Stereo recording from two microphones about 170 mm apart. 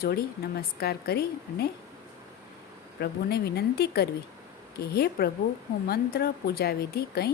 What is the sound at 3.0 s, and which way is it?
A woman's voice, 70° left (ahead or behind).